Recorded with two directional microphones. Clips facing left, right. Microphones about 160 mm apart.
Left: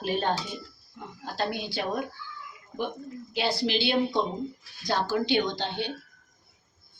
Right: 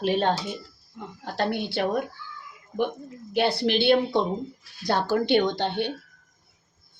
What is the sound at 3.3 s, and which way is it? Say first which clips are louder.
A woman's voice: right 5 dB; 60° right (ahead or behind).